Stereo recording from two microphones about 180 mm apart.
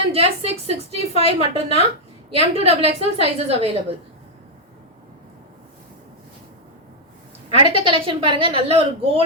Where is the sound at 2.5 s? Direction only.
35° right (ahead or behind).